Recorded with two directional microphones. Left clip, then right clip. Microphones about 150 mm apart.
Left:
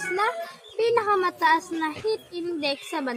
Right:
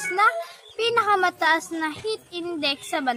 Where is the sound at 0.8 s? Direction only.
25° right (ahead or behind).